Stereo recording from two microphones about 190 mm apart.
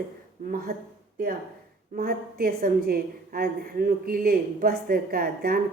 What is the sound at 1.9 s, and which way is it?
A woman's voice, 50° right (ahead or behind).